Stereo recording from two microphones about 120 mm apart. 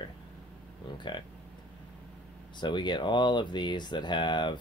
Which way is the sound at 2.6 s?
40° left (ahead or behind).